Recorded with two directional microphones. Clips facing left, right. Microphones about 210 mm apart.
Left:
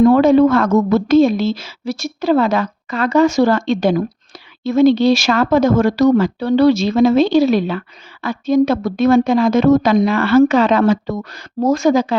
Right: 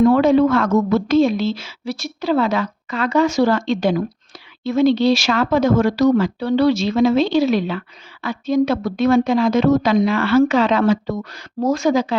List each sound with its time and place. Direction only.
0.0 s a woman's voice: 45° left (ahead or behind)